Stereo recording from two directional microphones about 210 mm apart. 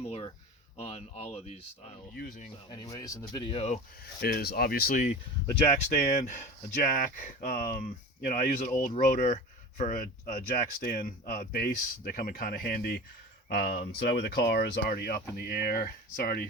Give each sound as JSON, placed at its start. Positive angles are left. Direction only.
{"t": 0.0, "sound": "a sound", "side_deg": 25}
{"t": 0.8, "sound": "speech", "side_deg": 30}
{"t": 2.6, "sound": "speech", "side_deg": 20}
{"t": 4.2, "sound": "speech", "side_deg": 45}